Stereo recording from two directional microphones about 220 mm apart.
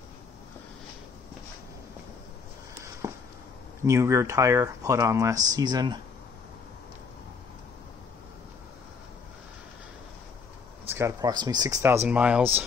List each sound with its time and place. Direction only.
3.0 s a sound: 15° right (ahead or behind)
3.8 s speech: 15° right (ahead or behind)
10.9 s speech: 10° right (ahead or behind)